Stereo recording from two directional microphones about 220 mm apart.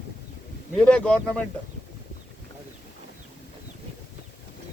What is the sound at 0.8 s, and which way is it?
Speech, 5° left (ahead or behind).